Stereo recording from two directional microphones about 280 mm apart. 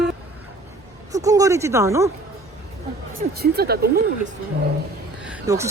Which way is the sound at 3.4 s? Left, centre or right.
Right.